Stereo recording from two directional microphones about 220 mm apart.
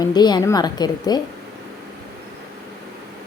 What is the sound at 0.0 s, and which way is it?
A woman's voice, 20° left (ahead or behind).